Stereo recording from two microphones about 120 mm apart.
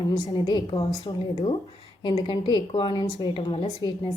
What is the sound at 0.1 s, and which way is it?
A woman's voice, 35° left (ahead or behind).